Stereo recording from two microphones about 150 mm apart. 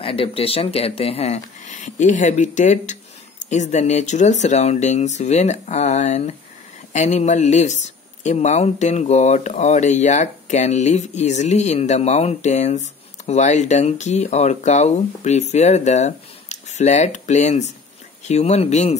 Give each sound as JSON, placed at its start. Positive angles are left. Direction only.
{"t": 0.0, "sound": "speech", "side_deg": 35}